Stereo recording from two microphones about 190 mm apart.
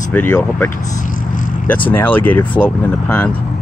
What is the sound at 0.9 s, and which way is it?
Vehicle, 45° left (ahead or behind).